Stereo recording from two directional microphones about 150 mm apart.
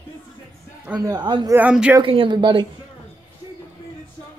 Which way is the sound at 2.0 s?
35° right (ahead or behind).